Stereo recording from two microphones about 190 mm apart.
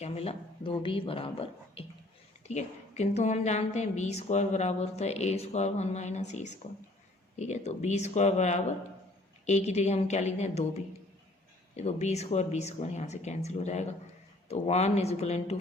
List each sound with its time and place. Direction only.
0.0 s a woman's voice: 35° left (ahead or behind)